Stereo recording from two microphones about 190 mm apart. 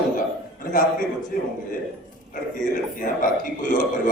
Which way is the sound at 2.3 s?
45° left (ahead or behind).